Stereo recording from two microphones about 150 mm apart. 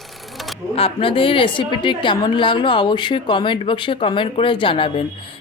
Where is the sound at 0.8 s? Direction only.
35° left (ahead or behind).